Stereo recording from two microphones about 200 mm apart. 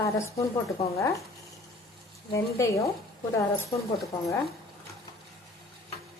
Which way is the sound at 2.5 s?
15° left (ahead or behind).